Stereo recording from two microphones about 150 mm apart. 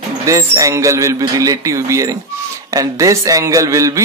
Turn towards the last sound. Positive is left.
turn(degrees=-20)  # may be behind; listen again after turning